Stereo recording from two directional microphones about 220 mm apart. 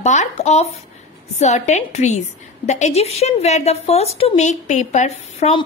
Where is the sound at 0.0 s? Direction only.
30° left (ahead or behind).